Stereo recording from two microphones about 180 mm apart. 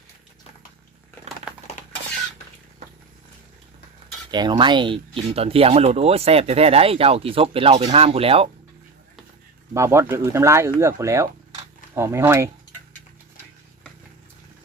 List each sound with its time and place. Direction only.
1.5 s a sound: 5° right (ahead or behind)
4.3 s speech: 25° right (ahead or behind)
9.7 s speech: 15° right (ahead or behind)